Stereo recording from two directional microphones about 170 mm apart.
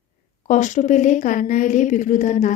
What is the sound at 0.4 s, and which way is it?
A woman's voice, 45° left (ahead or behind).